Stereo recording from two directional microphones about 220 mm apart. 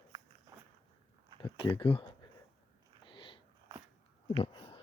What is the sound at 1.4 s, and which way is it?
Speech, 20° left (ahead or behind).